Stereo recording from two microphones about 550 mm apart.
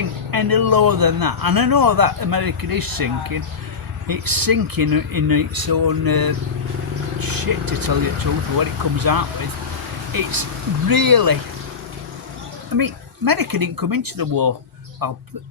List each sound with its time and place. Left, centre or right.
0.3 s speech: right
12.7 s speech: right